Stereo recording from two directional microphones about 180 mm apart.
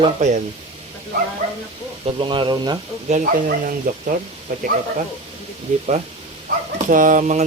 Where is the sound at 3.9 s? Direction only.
50° right (ahead or behind).